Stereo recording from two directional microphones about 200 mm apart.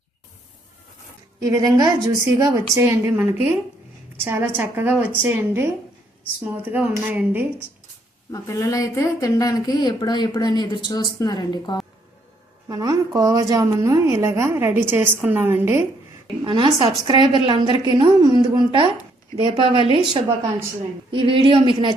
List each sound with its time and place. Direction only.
1.4 s a woman's voice: 20° right (ahead or behind)
8.3 s speech: 15° left (ahead or behind)
12.6 s a woman's voice: 15° right (ahead or behind)
16.2 s a woman's voice: 25° right (ahead or behind)
21.1 s a woman's voice: 25° right (ahead or behind)